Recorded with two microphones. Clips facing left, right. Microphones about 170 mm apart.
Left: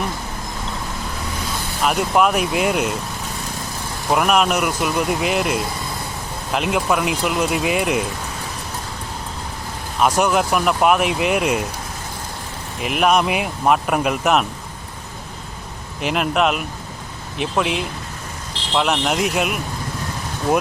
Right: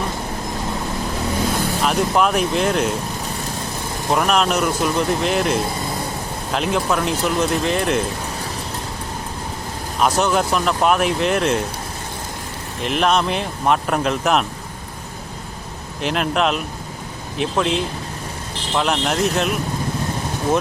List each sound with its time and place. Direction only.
1.8 s speech: 5° left (ahead or behind)
4.1 s speech: 5° left (ahead or behind)
10.0 s speech: 10° left (ahead or behind)
12.8 s speech: 5° left (ahead or behind)
16.0 s speech: 5° left (ahead or behind)